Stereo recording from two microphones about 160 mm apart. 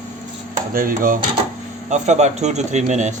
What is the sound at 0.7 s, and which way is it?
Speech, 60° right (ahead or behind).